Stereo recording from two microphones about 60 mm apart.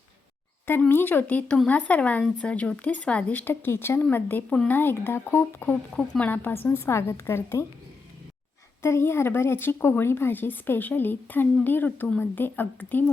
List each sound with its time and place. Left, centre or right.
0.9 s speech: left
1.6 s speech: left
3.4 s speech: left
6.0 s speech: left
6.7 s a woman's voice: left
8.8 s speech: left